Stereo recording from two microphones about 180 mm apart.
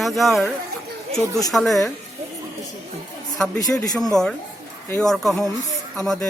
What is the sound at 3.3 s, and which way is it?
Speech, 5° left (ahead or behind).